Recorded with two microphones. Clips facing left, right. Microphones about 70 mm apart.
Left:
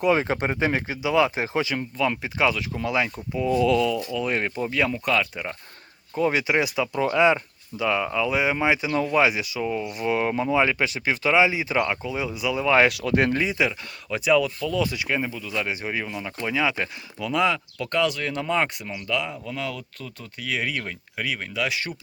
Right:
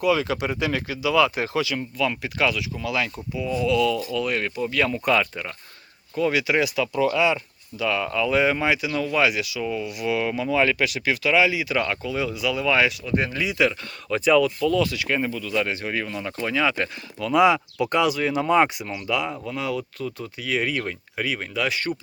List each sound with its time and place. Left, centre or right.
0.0 s speech: left
2.6 s speech: left
3.3 s speech: left
4.1 s speech: left
4.9 s speech: centre
6.1 s speech: left
7.8 s speech: left
8.7 s speech: left
12.9 s speech: left
13.3 s speech: left
13.6 s speech: centre
14.8 s speech: centre
17.3 s speech: centre